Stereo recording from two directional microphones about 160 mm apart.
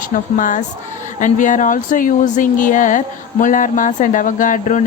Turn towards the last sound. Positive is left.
turn(degrees=55)  # may be behind; listen again after turning